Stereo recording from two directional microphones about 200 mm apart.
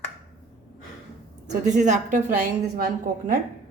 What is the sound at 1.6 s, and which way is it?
Speech, 35° right (ahead or behind).